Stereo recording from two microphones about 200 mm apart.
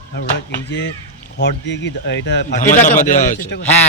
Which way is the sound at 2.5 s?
40° left (ahead or behind).